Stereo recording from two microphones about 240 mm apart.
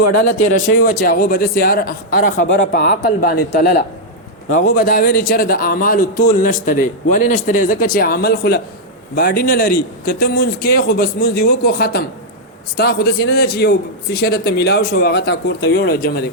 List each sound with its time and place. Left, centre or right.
0.0 s speech: left
0.9 s a man's voice: left